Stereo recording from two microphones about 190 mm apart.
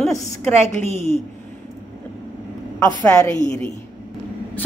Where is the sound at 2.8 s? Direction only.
15° left (ahead or behind).